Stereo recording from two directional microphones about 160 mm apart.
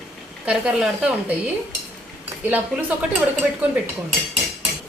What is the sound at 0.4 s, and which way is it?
Speech, 5° right (ahead or behind).